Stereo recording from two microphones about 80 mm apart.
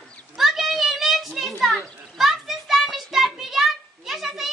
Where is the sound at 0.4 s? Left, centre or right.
Centre.